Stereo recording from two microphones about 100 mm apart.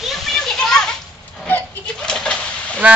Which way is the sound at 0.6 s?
5° left (ahead or behind).